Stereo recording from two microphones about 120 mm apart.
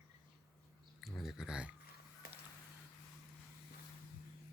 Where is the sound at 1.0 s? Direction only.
Centre (ahead or behind).